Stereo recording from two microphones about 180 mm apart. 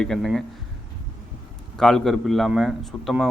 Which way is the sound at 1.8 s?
5° left (ahead or behind).